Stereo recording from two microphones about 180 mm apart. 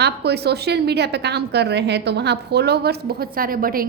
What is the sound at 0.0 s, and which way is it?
A woman's voice, 65° right (ahead or behind).